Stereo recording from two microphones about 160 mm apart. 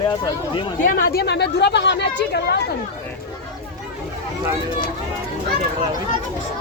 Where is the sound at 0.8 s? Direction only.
70° left (ahead or behind); by 2.6 s 90° left.